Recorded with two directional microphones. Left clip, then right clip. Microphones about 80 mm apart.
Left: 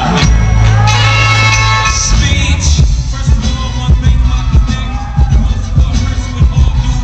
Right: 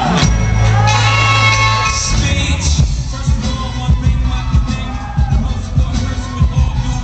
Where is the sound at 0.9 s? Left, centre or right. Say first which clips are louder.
Left 2 dB; left.